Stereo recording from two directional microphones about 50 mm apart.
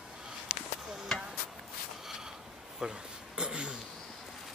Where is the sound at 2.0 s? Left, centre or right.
Centre.